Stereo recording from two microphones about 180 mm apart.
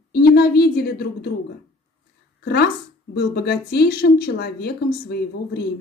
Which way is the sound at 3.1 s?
65° left (ahead or behind).